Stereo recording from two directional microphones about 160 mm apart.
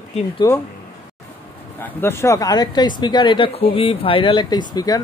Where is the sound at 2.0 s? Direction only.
15° left (ahead or behind).